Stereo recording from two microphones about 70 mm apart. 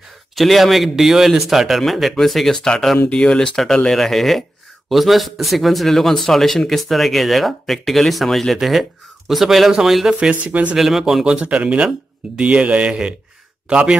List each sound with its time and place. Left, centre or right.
0.4 s speech: centre
10.4 s speech: centre
10.8 s speech: centre
11.3 s a man's voice: centre